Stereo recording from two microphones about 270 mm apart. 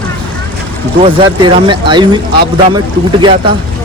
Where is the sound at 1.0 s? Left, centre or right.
Centre.